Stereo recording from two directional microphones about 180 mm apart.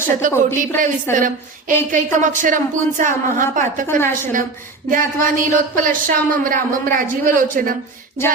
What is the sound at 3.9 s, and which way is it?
Speech, 15° left (ahead or behind).